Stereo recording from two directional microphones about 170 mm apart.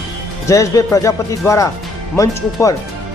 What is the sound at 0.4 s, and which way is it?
Speech, 20° left (ahead or behind).